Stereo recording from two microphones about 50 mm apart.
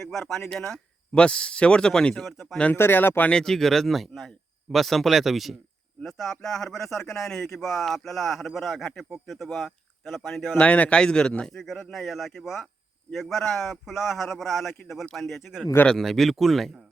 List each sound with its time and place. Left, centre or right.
0.0 s speech: centre
1.1 s speech: centre
2.2 s speech: centre
2.7 s speech: left
3.2 s speech: centre
10.6 s speech: left; by 16.7 s centre